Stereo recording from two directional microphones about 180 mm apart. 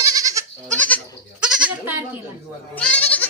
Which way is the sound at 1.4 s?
5° right (ahead or behind).